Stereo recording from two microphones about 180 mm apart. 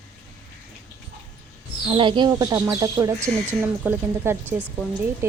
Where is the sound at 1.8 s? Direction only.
30° right (ahead or behind).